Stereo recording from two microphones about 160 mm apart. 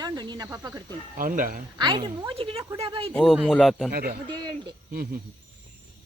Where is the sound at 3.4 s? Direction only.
Centre (ahead or behind).